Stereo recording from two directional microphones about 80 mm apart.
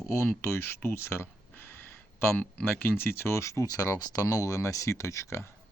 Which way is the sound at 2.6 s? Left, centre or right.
Left.